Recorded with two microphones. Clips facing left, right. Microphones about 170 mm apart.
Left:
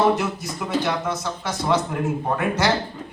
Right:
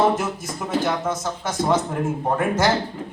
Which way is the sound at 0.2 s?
45° right (ahead or behind).